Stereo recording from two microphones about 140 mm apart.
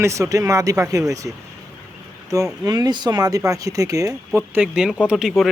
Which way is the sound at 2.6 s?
30° right (ahead or behind).